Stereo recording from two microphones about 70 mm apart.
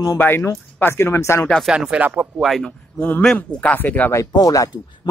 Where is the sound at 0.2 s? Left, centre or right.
Left.